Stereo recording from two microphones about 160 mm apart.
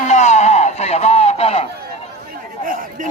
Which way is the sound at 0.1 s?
45° left (ahead or behind).